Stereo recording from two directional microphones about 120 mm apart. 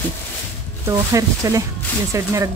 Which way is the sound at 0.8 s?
25° right (ahead or behind).